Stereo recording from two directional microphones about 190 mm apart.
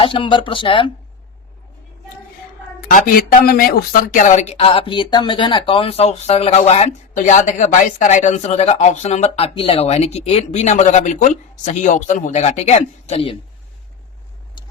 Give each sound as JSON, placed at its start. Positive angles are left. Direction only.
{"t": 0.0, "sound": "speech", "side_deg": 25}
{"t": 2.9, "sound": "speech", "side_deg": 45}